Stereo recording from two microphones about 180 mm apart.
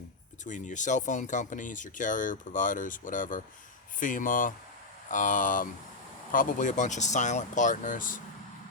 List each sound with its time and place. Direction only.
0.4 s speech: 45° left (ahead or behind)